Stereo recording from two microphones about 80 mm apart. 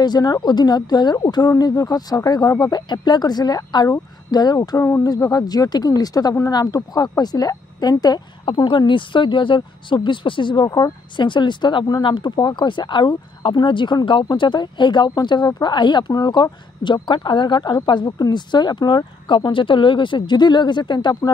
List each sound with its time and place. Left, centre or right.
0.0 s speech: left
1.6 s speech: left
16.8 s speech: left